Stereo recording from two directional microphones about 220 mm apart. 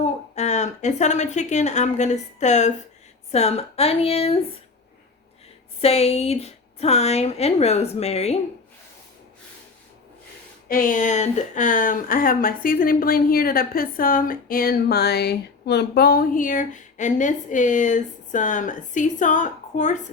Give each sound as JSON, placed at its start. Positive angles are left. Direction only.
{"t": 0.0, "sound": "a woman's voice", "side_deg": 30}
{"t": 5.8, "sound": "a woman's voice", "side_deg": 30}
{"t": 10.7, "sound": "speech", "side_deg": 40}